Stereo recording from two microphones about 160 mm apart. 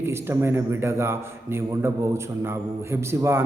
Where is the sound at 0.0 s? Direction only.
15° right (ahead or behind).